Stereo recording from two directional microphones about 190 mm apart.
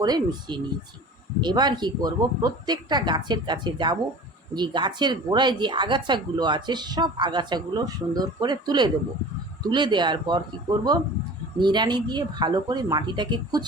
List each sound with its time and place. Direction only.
0.0 s speech: 20° right (ahead or behind)